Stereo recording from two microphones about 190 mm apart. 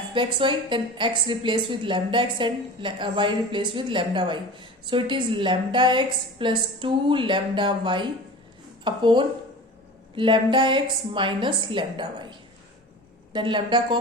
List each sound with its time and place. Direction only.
0.1 s a woman's voice: 25° right (ahead or behind)
13.3 s a woman's voice: 25° right (ahead or behind)